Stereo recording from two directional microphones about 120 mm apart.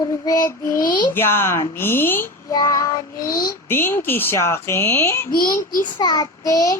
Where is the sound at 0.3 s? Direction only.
30° left (ahead or behind).